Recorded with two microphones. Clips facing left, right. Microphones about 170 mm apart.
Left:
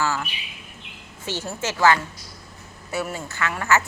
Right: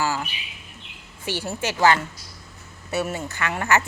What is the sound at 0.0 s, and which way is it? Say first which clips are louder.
Bird: even; 15° right (ahead or behind).